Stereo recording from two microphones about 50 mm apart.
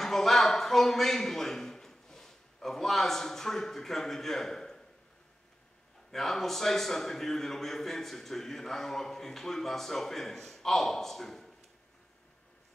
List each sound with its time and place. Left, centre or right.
0.0 s speech: centre
6.1 s a man's voice: centre